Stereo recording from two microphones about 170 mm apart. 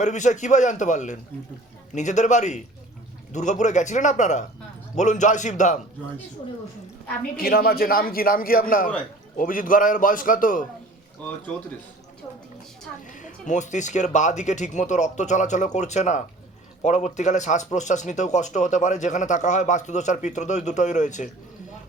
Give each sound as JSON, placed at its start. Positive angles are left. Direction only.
{"t": 0.0, "sound": "speech", "side_deg": 45}
{"t": 7.3, "sound": "a man's voice", "side_deg": 65}
{"t": 13.1, "sound": "speech", "side_deg": 45}